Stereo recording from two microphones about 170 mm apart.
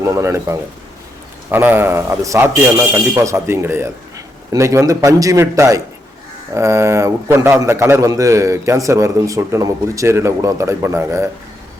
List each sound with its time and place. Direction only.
0.0 s a man's voice: 15° right (ahead or behind)